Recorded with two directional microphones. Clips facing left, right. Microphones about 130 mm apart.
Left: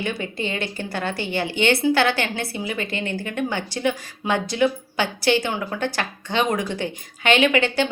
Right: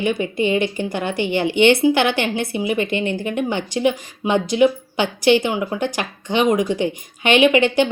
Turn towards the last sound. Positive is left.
turn(degrees=-20)  # may be behind; listen again after turning